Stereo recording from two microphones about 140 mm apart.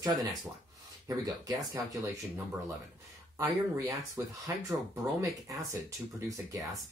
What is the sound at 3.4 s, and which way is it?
Speech, 25° right (ahead or behind).